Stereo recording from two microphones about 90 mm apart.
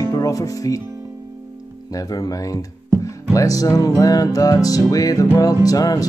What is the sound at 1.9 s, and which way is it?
Music, 45° left (ahead or behind).